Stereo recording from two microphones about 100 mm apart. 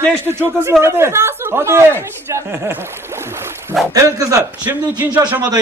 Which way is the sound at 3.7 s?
Centre (ahead or behind).